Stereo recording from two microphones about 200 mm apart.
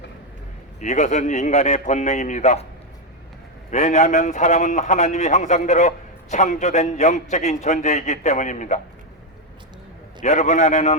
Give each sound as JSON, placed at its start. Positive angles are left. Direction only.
{"t": 0.8, "sound": "a man's voice", "side_deg": 35}
{"t": 3.7, "sound": "a man's voice", "side_deg": 35}
{"t": 10.2, "sound": "a man's voice", "side_deg": 35}